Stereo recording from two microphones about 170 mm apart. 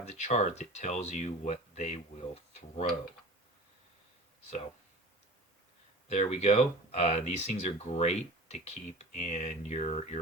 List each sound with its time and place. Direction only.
0.0 s speech: 40° left (ahead or behind)
6.1 s speech: 40° left (ahead or behind)